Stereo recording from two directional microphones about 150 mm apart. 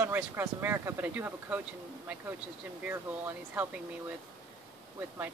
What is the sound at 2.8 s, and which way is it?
Speech, 10° right (ahead or behind).